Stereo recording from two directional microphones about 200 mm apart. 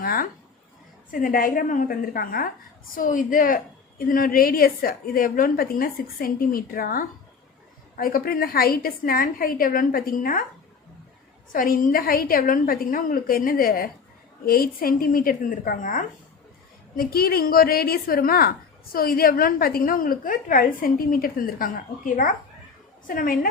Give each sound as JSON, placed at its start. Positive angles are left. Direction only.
{"t": 0.0, "sound": "a sound", "side_deg": 45}
{"t": 1.1, "sound": "a woman's voice", "side_deg": 45}
{"t": 11.5, "sound": "a woman's voice", "side_deg": 45}